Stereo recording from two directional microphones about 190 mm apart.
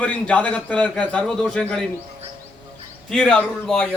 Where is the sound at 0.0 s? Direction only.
5° left (ahead or behind).